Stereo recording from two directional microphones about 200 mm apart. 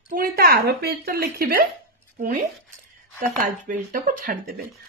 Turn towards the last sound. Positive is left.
turn(degrees=-45)  # may be behind; listen again after turning